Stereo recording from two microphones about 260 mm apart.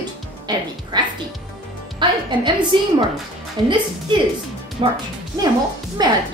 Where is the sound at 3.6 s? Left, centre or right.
Centre.